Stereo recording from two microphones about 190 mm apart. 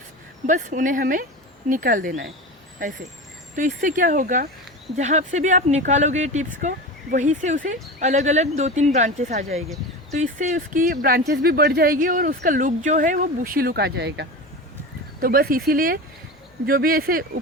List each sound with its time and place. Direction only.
0.4 s speech: 40° right (ahead or behind)
3.5 s speech: 45° right (ahead or behind); by 14.3 s 60° right (ahead or behind)
15.2 s speech: 50° right (ahead or behind)